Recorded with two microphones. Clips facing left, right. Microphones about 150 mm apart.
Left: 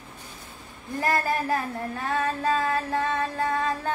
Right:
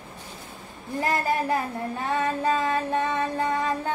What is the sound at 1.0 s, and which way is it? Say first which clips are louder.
A woman's voice: right 1 dB; 20° right (ahead or behind).